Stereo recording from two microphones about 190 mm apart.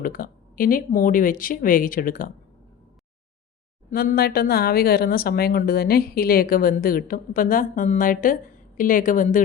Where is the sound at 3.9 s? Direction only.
55° left (ahead or behind).